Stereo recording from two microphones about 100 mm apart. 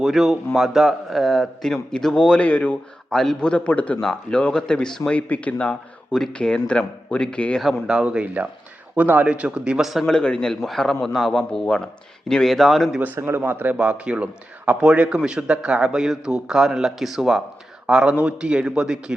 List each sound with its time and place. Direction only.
0.0 s a man's voice: centre (ahead or behind)
7.6 s a man's voice: 5° right (ahead or behind)
13.1 s a man's voice: 20° right (ahead or behind)